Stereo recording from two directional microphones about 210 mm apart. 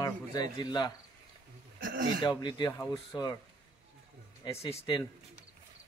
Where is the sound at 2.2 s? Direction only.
20° left (ahead or behind).